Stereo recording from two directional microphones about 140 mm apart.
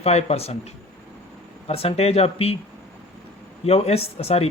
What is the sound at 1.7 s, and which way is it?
Speech, 45° left (ahead or behind).